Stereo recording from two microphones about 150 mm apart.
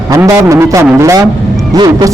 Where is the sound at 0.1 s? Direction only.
20° right (ahead or behind).